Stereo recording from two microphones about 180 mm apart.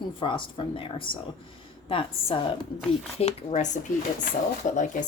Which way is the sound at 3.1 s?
40° left (ahead or behind).